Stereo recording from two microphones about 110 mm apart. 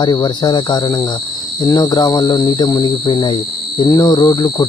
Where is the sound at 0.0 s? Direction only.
40° left (ahead or behind).